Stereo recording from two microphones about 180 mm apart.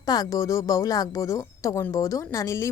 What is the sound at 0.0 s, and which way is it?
A woman's voice, 20° left (ahead or behind).